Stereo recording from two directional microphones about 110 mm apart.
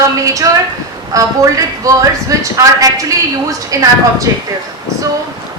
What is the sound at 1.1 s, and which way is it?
A man's voice, 30° right (ahead or behind).